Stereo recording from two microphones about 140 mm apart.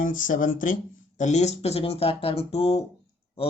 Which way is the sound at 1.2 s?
55° left (ahead or behind).